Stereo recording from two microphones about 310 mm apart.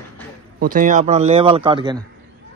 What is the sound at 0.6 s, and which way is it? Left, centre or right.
A man's voice, right.